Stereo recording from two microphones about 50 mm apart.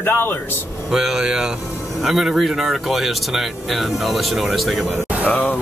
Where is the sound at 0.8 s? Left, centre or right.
Centre.